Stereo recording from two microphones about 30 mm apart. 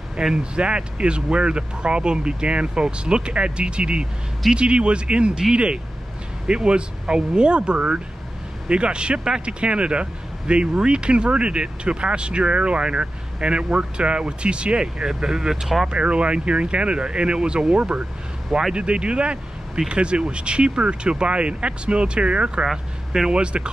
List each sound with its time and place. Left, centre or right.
0.4 s speech: right
15.0 s speech: right
15.9 s speech: right
22.7 s speech: centre
23.3 s speech: right